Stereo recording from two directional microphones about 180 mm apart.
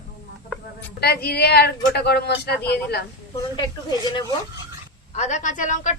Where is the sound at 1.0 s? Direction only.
65° left (ahead or behind).